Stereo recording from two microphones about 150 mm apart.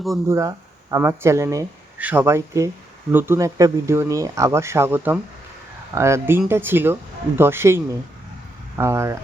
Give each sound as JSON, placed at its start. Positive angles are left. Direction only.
{"t": 0.3, "sound": "speech", "side_deg": -20}